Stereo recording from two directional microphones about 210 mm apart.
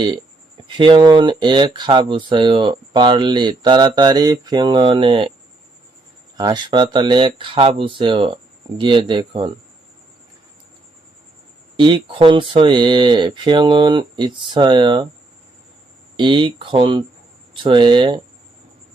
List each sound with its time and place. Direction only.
0.0 s speech: 20° right (ahead or behind)
6.3 s speech: 20° right (ahead or behind)
11.8 s speech: 25° right (ahead or behind)
16.1 s speech: 25° right (ahead or behind)